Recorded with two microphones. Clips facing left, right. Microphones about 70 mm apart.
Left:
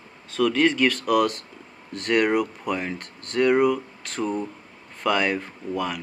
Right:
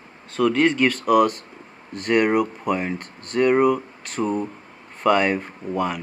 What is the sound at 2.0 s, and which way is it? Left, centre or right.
Speech, centre.